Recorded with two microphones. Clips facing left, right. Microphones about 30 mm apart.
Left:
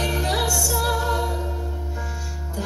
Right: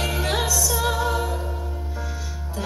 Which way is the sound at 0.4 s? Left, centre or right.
Centre.